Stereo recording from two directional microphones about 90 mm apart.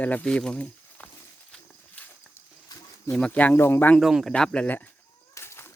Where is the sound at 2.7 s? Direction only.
45° left (ahead or behind).